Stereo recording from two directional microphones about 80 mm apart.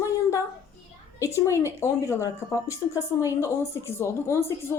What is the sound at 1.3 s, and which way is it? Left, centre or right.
Speech, left.